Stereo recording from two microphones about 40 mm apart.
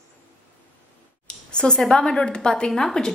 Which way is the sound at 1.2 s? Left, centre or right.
Left.